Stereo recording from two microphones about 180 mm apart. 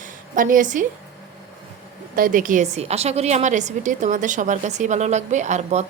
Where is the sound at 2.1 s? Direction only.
50° right (ahead or behind).